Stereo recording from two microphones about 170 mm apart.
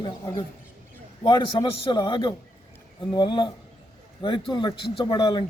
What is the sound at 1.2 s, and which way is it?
Speech, 25° left (ahead or behind).